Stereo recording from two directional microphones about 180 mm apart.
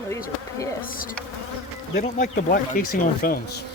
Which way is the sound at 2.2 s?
45° left (ahead or behind).